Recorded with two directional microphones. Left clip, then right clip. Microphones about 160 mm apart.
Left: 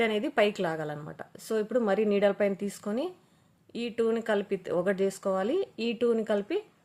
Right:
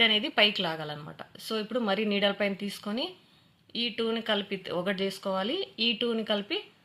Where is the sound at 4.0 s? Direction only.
40° left (ahead or behind).